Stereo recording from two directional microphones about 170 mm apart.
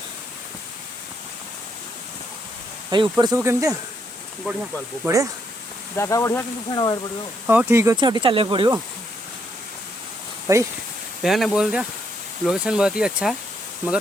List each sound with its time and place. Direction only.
2.9 s speech: 25° right (ahead or behind)
4.4 s speech: 5° right (ahead or behind)
5.0 s speech: 20° right (ahead or behind)
6.0 s speech: 15° left (ahead or behind)
7.4 s speech: 10° right (ahead or behind); by 8.8 s 25° right (ahead or behind)
10.4 s speech: 15° right (ahead or behind)
11.2 s speech: centre (ahead or behind)